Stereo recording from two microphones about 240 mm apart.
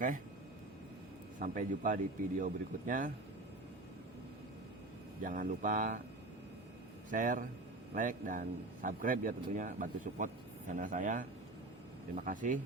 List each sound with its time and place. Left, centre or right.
1.4 s speech: right
5.2 s speech: right
7.1 s speech: right